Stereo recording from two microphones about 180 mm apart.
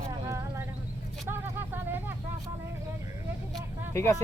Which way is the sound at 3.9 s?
15° left (ahead or behind).